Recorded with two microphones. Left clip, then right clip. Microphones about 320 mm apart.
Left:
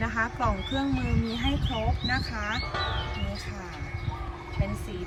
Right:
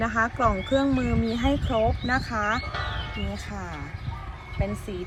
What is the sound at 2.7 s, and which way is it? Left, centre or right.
Music, left.